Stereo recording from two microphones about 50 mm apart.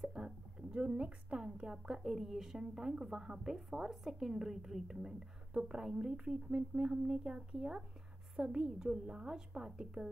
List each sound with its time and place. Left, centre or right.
0.0 s a woman's voice: centre
6.1 s a woman's voice: right